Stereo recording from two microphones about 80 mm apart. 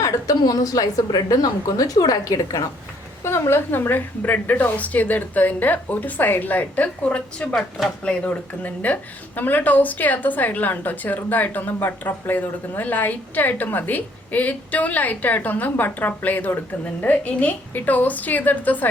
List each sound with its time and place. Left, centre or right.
0.0 s a woman's voice: left
3.2 s a woman's voice: left; by 7.5 s centre
7.5 s speech: centre
8.0 s a woman's voice: centre